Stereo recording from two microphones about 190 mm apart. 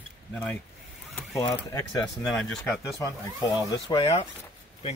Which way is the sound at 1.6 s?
20° left (ahead or behind).